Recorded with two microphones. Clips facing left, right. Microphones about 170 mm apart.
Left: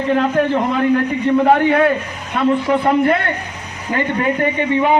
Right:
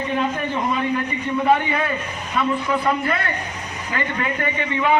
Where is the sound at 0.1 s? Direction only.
70° left (ahead or behind).